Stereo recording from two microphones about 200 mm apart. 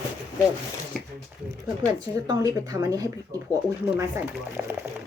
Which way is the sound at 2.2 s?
15° right (ahead or behind).